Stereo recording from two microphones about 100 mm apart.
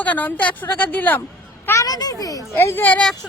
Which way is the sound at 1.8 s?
40° left (ahead or behind).